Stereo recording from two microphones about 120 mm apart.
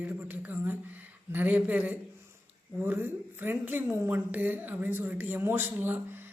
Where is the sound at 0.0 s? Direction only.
15° right (ahead or behind).